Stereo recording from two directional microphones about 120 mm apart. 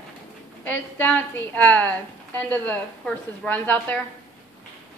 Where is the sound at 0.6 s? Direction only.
15° left (ahead or behind).